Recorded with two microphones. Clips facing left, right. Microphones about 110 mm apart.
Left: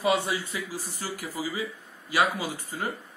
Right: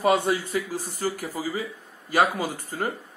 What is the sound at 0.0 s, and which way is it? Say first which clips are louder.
Speech: right 4 dB; 50° right (ahead or behind).